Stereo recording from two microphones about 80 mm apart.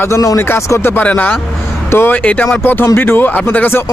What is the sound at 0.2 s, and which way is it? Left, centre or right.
Speech, left.